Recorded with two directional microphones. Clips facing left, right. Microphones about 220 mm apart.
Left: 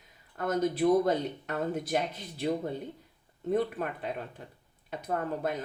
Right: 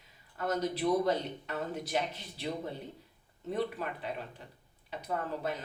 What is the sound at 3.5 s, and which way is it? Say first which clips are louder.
Speech: left 5 dB; 50° left (ahead or behind).